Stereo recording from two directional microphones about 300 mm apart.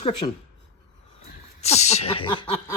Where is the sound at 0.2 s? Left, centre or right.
Centre.